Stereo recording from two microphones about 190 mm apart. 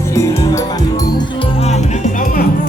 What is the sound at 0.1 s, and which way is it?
Music, 15° left (ahead or behind).